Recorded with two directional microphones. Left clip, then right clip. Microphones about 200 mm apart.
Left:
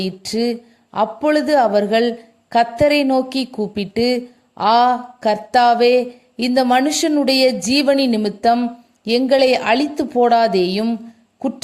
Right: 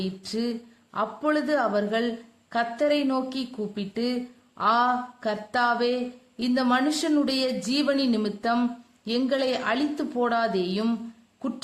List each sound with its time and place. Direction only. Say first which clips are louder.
0.0 s a man's voice: left 10 dB; 25° left (ahead or behind)